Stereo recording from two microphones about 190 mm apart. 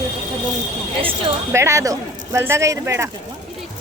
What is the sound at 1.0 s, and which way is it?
Speech, 25° right (ahead or behind).